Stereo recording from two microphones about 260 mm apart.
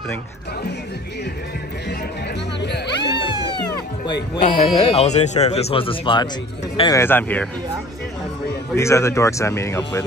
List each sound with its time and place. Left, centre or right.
2.6 s music: left
4.4 s speech: left; by 7.4 s centre
8.7 s speech: centre